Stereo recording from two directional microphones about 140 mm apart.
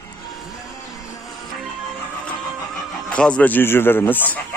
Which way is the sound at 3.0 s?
5° left (ahead or behind).